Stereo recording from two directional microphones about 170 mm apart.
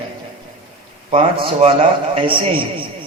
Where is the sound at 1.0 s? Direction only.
35° right (ahead or behind).